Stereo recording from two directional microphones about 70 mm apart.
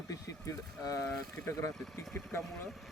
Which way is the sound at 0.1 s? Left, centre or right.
Left.